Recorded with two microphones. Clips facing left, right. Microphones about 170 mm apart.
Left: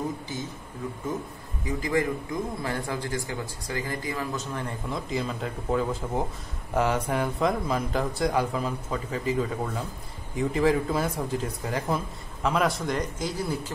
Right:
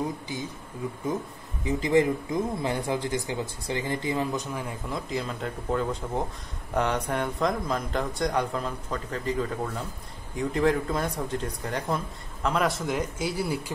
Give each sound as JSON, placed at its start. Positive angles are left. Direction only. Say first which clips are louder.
{"t": 1.6, "sound": "speech", "louder": "right 4 dB", "side_deg": -25}
{"t": 4.6, "sound": "speech", "louder": "left 1 dB", "side_deg": -5}